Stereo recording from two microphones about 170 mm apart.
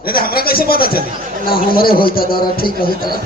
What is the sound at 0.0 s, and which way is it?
A man's voice, 60° left (ahead or behind).